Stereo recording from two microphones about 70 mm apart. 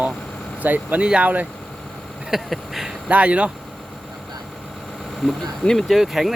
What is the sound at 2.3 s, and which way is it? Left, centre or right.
Speech, centre.